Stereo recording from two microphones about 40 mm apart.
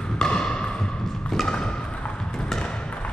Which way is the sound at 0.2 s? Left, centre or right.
Left.